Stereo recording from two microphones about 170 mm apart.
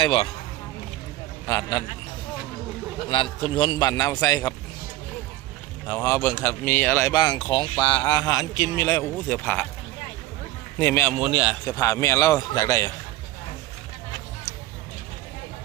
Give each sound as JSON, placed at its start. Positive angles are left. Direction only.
{"t": 0.0, "sound": "speech", "side_deg": 30}
{"t": 1.5, "sound": "speech", "side_deg": 20}
{"t": 3.4, "sound": "speech", "side_deg": 30}
{"t": 5.9, "sound": "speech", "side_deg": 15}
{"t": 7.1, "sound": "speech", "side_deg": 25}
{"t": 10.8, "sound": "speech", "side_deg": 15}
{"t": 11.2, "sound": "speech", "side_deg": -10}
{"t": 11.6, "sound": "speech", "side_deg": 20}